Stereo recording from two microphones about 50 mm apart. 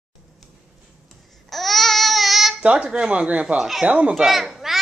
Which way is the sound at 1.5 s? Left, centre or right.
Centre.